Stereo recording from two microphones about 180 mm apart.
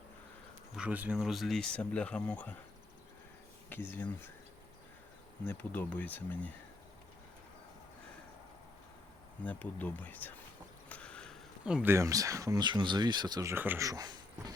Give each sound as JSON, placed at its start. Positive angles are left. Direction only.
{"t": 0.8, "sound": "speech", "side_deg": -10}
{"t": 3.7, "sound": "speech", "side_deg": 10}
{"t": 5.5, "sound": "speech", "side_deg": 10}
{"t": 9.4, "sound": "speech", "side_deg": 10}
{"t": 10.8, "sound": "a sound", "side_deg": 5}
{"t": 11.6, "sound": "speech", "side_deg": -5}